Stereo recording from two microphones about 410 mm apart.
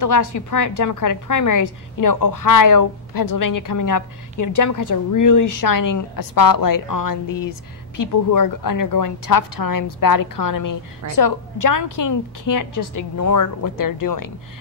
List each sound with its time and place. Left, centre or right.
0.0 s a woman's voice: left
12.0 s a woman's voice: left